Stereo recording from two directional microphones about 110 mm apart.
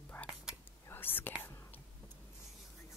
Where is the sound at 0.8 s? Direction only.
20° left (ahead or behind).